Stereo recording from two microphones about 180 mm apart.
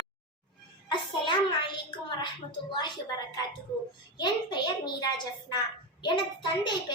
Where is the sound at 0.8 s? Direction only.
25° left (ahead or behind).